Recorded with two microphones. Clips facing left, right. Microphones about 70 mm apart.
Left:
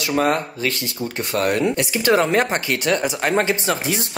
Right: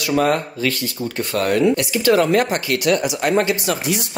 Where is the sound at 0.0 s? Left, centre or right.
Left.